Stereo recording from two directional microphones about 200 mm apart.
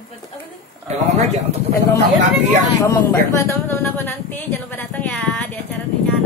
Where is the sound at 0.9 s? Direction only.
35° right (ahead or behind).